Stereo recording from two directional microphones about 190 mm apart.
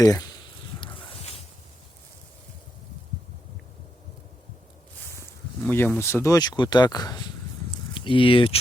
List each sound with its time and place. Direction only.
0.0 s speech: 20° left (ahead or behind)
0.8 s a sound: 25° left (ahead or behind)
5.1 s speech: 15° left (ahead or behind)